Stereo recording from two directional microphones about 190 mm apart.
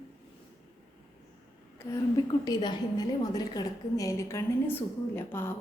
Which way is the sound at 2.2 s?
20° left (ahead or behind).